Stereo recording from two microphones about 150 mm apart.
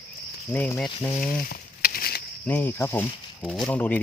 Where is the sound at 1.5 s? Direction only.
85° left.